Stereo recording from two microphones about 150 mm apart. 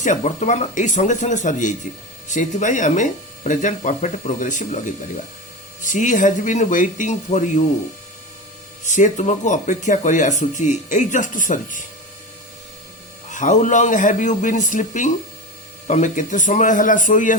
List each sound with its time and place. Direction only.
0.0 s speech: 55° left (ahead or behind)
8.9 s speech: 55° left (ahead or behind)
13.3 s speech: 55° left (ahead or behind)